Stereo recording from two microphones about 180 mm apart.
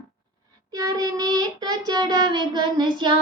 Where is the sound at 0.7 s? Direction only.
20° right (ahead or behind).